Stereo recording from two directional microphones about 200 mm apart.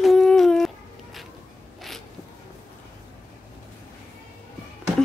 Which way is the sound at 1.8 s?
Centre (ahead or behind).